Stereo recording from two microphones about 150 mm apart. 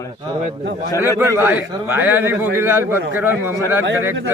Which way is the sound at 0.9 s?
20° left (ahead or behind).